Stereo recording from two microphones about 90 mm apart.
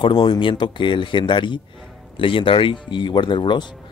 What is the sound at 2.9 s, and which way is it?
Speech, 60° left (ahead or behind).